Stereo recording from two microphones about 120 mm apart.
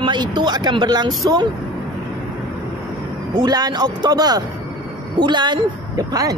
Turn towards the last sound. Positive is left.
turn(degrees=-30)  # may be behind; listen again after turning